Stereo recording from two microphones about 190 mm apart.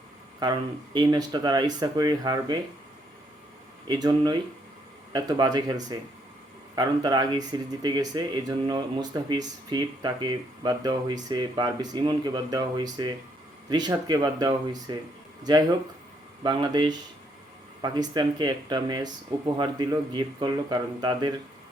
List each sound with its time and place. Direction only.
0.4 s speech: 20° right (ahead or behind)
3.8 s speech: 20° right (ahead or behind)
16.4 s speech: 20° right (ahead or behind)